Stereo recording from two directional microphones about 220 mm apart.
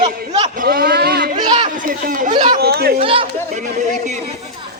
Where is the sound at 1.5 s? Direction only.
30° right (ahead or behind).